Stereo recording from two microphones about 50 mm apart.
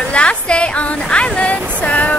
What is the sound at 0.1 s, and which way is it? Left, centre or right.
A woman's voice, left.